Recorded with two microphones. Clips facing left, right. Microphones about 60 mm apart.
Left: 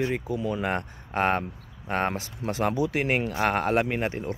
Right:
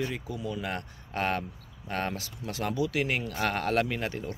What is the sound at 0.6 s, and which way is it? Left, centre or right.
Speech, left.